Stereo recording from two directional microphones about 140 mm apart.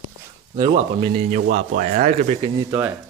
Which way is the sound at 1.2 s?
80° right.